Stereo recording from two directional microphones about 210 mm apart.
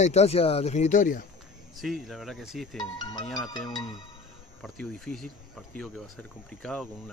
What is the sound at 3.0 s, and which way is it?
Speech, 20° left (ahead or behind).